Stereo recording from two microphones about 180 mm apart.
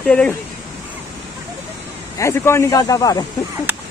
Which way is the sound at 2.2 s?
15° left (ahead or behind).